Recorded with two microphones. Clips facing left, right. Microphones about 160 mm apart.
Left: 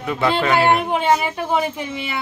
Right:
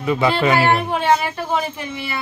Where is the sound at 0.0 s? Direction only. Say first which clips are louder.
Right 2 dB; 5° right (ahead or behind).